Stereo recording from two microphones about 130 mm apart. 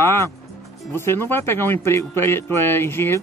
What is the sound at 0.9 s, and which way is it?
A man's voice, 20° left (ahead or behind).